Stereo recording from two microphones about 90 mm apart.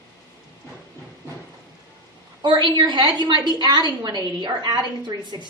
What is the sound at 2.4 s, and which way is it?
A woman's voice, 60° right (ahead or behind).